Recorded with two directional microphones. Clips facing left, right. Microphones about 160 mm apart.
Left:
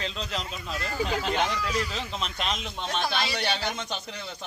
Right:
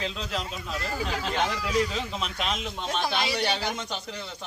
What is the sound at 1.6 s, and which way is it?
A woman's voice, 15° right (ahead or behind).